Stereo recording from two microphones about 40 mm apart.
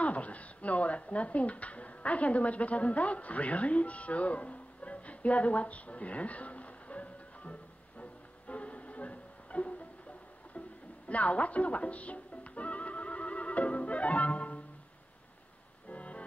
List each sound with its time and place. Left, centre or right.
0.0 s speech: left
8.0 s music: left
11.1 s music: left
15.9 s music: left